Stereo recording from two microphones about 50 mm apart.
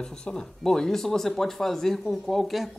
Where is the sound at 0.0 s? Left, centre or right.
Centre.